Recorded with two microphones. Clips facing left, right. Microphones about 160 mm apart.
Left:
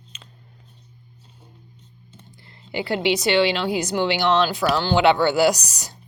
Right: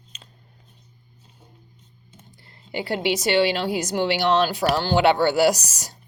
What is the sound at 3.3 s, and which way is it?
A woman's voice, 40° right (ahead or behind).